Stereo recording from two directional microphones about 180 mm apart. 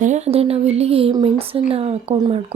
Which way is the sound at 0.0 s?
40° right (ahead or behind).